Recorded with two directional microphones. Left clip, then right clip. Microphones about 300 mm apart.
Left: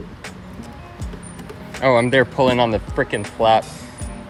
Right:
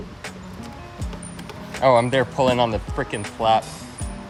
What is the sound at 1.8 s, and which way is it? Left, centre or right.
Speech, centre.